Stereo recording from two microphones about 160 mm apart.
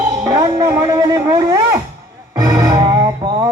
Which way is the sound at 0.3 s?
20° right (ahead or behind).